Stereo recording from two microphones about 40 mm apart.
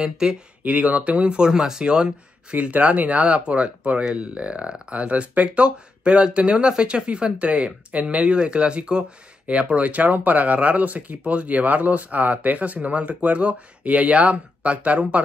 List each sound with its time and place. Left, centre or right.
0.0 s speech: centre
0.7 s speech: right
1.3 s speech: centre
2.7 s speech: right